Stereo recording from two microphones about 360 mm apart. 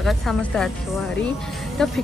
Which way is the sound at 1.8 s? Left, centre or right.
Centre.